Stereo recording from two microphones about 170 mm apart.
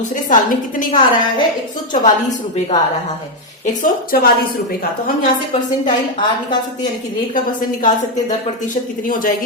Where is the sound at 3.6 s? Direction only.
55° left (ahead or behind).